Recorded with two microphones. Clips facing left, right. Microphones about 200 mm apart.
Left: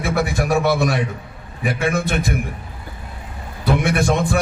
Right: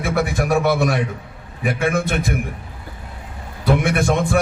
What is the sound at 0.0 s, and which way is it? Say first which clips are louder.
A man's voice: even; 50° right (ahead or behind).